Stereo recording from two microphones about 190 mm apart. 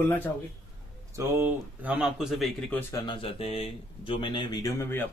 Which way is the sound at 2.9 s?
25° left (ahead or behind).